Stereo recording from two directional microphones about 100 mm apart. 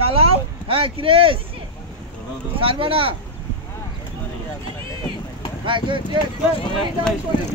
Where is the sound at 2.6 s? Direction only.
65° right (ahead or behind).